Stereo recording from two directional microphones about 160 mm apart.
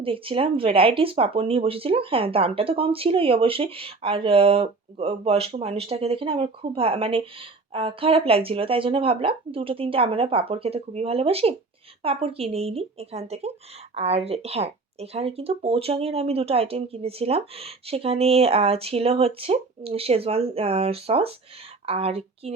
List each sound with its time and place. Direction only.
0.0 s speech: 35° right (ahead or behind)